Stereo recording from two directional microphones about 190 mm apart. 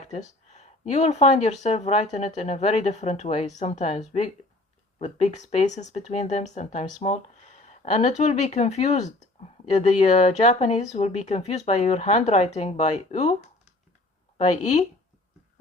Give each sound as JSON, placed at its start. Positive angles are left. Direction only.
{"t": 0.1, "sound": "speech", "side_deg": 35}